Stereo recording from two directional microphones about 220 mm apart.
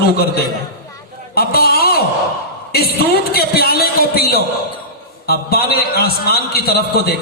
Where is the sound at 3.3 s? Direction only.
45° left (ahead or behind).